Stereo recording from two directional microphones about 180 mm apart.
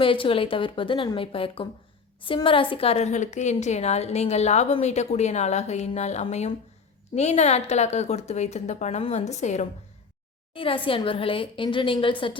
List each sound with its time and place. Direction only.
0.0 s a woman's voice: 30° left (ahead or behind)
10.5 s a woman's voice: 30° left (ahead or behind)